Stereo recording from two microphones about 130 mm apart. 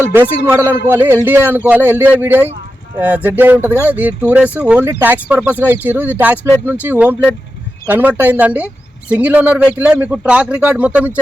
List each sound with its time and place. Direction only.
0.1 s speech: 15° right (ahead or behind)